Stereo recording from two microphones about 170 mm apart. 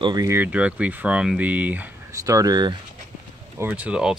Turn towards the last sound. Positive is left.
turn(degrees=-5)  # may be behind; listen again after turning